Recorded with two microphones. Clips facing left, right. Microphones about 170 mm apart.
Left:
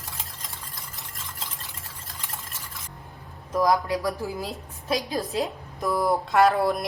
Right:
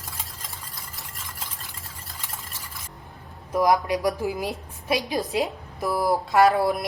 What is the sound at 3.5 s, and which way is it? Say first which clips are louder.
Speech: right 1 dB; 20° right (ahead or behind).